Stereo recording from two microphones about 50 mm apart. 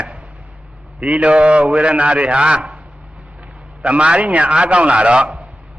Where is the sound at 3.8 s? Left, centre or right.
Right.